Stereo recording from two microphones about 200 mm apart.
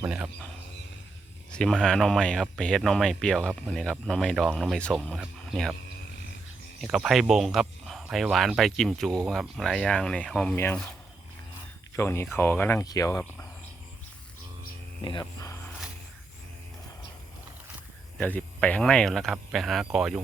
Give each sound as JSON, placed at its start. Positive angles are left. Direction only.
{"t": 0.0, "sound": "speech", "side_deg": -5}
{"t": 1.5, "sound": "speech", "side_deg": 5}
{"t": 6.8, "sound": "speech", "side_deg": 0}
{"t": 11.9, "sound": "speech", "side_deg": 15}
{"t": 15.0, "sound": "a sound", "side_deg": 20}
{"t": 18.2, "sound": "speech", "side_deg": 10}